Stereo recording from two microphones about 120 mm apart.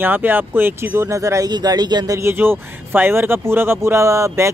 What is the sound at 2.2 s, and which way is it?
Speech, 20° right (ahead or behind).